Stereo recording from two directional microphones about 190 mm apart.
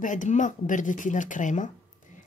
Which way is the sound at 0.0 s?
40° left (ahead or behind).